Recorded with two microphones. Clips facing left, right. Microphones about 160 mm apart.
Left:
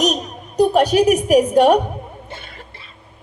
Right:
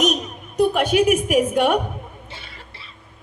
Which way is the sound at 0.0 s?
40° left (ahead or behind).